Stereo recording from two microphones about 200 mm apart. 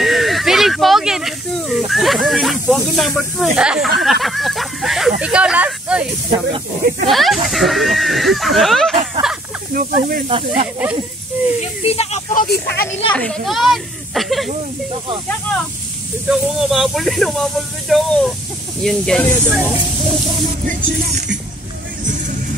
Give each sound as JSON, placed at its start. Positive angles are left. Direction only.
{"t": 0.0, "sound": "snake", "side_deg": 0}
{"t": 4.0, "sound": "speech", "side_deg": 0}
{"t": 5.2, "sound": "snake", "side_deg": -5}
{"t": 7.1, "sound": "speech", "side_deg": 0}
{"t": 9.8, "sound": "speech", "side_deg": -45}
{"t": 10.2, "sound": "speech", "side_deg": -30}
{"t": 11.8, "sound": "speech", "side_deg": 30}
{"t": 12.4, "sound": "speech", "side_deg": 50}
{"t": 13.1, "sound": "speech", "side_deg": 5}
{"t": 16.3, "sound": "speech", "side_deg": 0}